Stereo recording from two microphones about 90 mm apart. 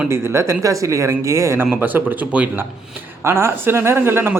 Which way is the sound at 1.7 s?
20° right (ahead or behind).